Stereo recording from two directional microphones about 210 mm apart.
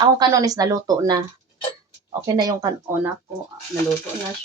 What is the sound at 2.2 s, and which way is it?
Speech, 20° right (ahead or behind).